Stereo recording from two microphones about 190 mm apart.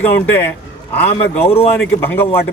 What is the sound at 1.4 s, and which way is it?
Speech, 30° left (ahead or behind).